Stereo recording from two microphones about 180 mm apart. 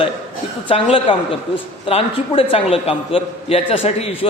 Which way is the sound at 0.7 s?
35° left (ahead or behind).